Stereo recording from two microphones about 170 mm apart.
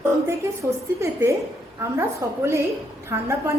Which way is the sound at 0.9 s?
15° right (ahead or behind).